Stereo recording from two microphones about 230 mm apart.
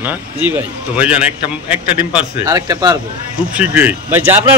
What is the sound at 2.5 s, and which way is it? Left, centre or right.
Speech, centre.